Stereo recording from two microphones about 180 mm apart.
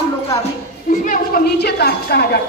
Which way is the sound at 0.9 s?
45° left (ahead or behind).